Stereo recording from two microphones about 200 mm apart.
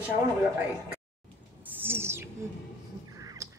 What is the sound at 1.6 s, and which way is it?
Owl, 10° right (ahead or behind).